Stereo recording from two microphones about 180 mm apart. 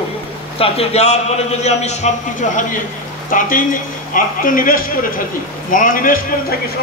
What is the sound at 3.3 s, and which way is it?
A man's voice, 50° left (ahead or behind).